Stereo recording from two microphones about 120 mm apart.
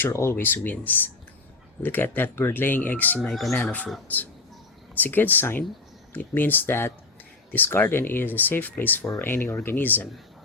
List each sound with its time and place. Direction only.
0.0 s speech: 20° left (ahead or behind)
3.2 s speech: centre (ahead or behind)
3.6 s speech: 10° left (ahead or behind)